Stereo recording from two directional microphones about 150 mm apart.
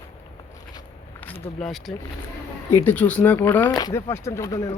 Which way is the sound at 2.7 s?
10° left (ahead or behind).